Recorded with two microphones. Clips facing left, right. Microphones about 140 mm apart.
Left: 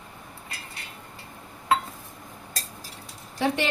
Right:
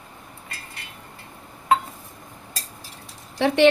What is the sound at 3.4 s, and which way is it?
Speech, 70° right (ahead or behind).